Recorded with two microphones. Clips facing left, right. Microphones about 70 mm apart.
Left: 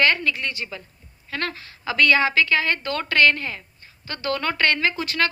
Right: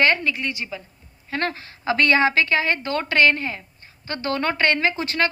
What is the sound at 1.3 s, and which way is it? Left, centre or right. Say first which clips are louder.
A woman's voice: right 3 dB; right.